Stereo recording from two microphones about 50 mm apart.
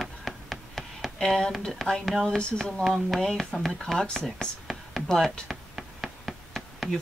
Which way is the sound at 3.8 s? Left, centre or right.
Centre.